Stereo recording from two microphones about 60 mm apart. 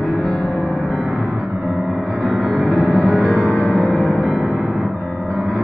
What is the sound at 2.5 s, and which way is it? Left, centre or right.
Music, centre.